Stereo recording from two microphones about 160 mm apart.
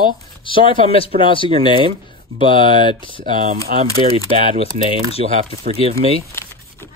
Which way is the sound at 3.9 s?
35° right (ahead or behind).